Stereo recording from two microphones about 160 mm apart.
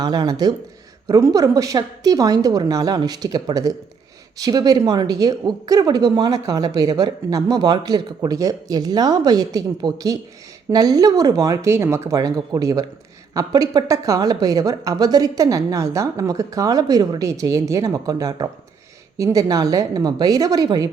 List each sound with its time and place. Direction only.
0.0 s speech: 25° right (ahead or behind)